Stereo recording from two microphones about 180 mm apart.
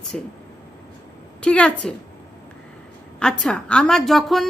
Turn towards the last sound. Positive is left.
turn(degrees=0)  # may be behind; listen again after turning